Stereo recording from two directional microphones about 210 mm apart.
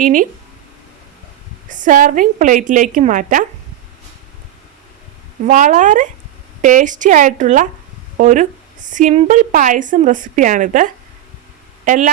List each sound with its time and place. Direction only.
0.0 s a woman's voice: 40° right (ahead or behind)
1.7 s a woman's voice: 40° right (ahead or behind)
5.5 s a woman's voice: 35° right (ahead or behind)